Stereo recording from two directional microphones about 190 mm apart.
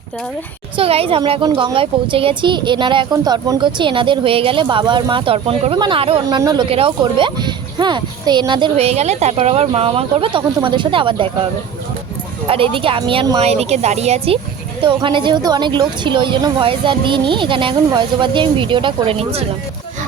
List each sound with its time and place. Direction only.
0.8 s speech: 30° right (ahead or behind)
12.5 s speech: 30° right (ahead or behind)